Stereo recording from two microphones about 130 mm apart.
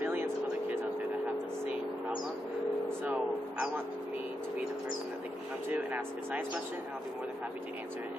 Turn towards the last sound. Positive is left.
turn(degrees=-15)  # may be behind; listen again after turning